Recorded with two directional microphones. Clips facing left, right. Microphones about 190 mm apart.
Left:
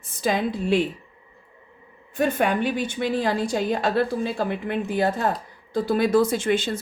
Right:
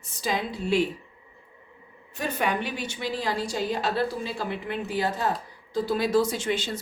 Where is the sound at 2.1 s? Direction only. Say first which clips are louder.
Left 6 dB; 50° left (ahead or behind).